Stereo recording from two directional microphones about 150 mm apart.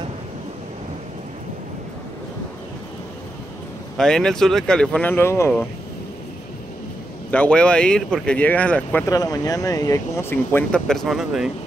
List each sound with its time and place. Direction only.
3.9 s speech: 5° left (ahead or behind)
7.2 s speech: 10° left (ahead or behind)
9.1 s speech: 25° left (ahead or behind); by 11.5 s centre (ahead or behind)